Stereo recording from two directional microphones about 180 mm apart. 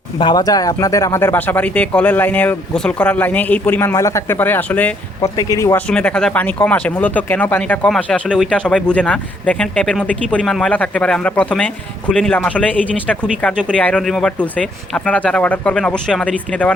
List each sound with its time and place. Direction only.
0.2 s speech: 25° left (ahead or behind)
5.9 s speech: 5° left (ahead or behind)